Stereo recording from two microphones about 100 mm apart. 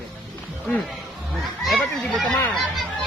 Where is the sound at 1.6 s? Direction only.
Centre (ahead or behind).